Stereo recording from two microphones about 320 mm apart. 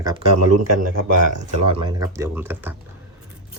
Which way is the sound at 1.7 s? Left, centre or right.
Centre.